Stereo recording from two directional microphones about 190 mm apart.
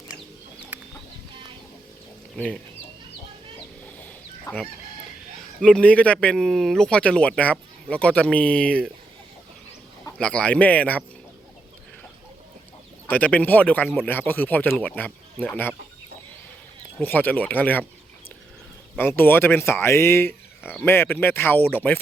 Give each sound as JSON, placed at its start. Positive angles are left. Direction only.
{"t": 0.7, "sound": "chicken", "side_deg": -10}
{"t": 2.4, "sound": "speech", "side_deg": 10}
{"t": 4.0, "sound": "fowl", "side_deg": 10}
{"t": 5.5, "sound": "speech", "side_deg": 5}
{"t": 10.2, "sound": "speech", "side_deg": 5}
{"t": 13.1, "sound": "speech", "side_deg": 10}
{"t": 17.0, "sound": "speech", "side_deg": 10}
{"t": 18.9, "sound": "speech", "side_deg": 10}